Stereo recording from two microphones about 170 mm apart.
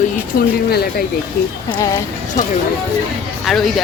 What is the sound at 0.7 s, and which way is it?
Speech, 70° left (ahead or behind).